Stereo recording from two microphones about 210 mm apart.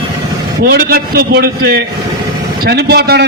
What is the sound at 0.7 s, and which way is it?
A man's voice, 45° right (ahead or behind).